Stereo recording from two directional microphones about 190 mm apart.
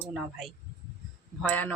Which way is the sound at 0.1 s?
Centre (ahead or behind).